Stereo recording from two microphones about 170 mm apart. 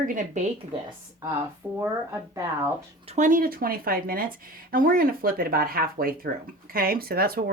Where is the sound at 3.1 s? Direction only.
50° right (ahead or behind).